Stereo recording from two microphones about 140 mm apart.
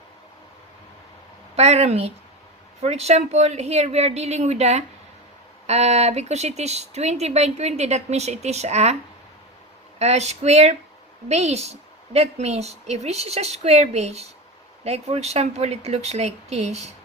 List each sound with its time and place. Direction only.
1.5 s speech: 50° right (ahead or behind)
10.0 s speech: 50° right (ahead or behind)